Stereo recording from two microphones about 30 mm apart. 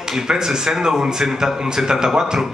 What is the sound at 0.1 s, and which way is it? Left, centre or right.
A man's voice, centre.